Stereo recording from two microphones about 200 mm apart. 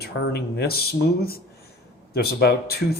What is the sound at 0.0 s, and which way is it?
Speech, 55° left (ahead or behind).